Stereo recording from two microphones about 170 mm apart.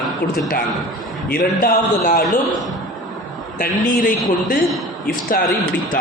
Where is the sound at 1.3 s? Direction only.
55° left (ahead or behind).